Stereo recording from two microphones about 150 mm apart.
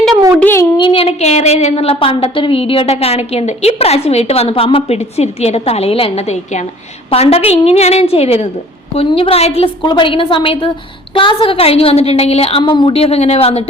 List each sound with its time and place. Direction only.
0.3 s a child's voice: 15° left (ahead or behind)
0.8 s a woman's voice: 35° left (ahead or behind)